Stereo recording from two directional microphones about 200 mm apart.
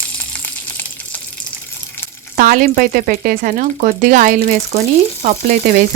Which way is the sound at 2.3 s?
45° right (ahead or behind).